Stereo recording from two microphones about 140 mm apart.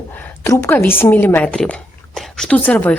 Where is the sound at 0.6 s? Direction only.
15° left (ahead or behind).